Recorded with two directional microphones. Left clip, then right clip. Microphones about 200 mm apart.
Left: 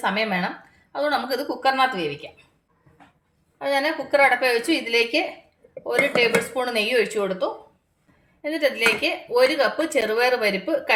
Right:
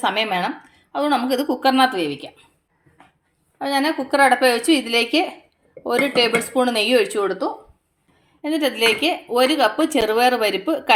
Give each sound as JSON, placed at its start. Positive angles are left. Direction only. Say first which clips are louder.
{"t": 0.0, "sound": "a woman's voice", "louder": "right 3 dB", "side_deg": -40}
{"t": 3.6, "sound": "speech", "louder": "right 2 dB", "side_deg": -40}